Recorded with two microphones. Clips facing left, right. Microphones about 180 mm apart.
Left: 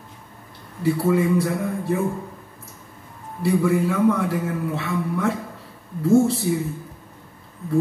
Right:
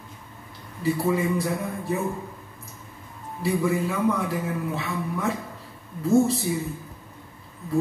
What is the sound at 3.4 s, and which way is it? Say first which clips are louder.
A man's voice: left 4 dB; 60° left (ahead or behind).